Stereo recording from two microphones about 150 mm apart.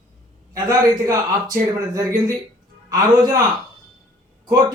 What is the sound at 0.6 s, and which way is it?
Speech, 25° right (ahead or behind).